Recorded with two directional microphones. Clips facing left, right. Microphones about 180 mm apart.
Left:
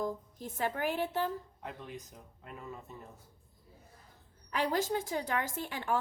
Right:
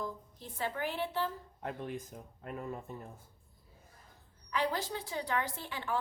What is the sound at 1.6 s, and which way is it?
Speech, 50° right (ahead or behind).